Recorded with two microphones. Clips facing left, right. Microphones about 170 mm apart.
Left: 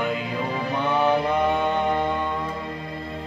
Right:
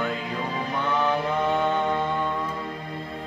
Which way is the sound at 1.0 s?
15° left (ahead or behind).